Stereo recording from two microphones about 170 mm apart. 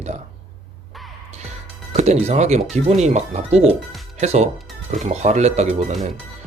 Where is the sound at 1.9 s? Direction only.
40° right (ahead or behind).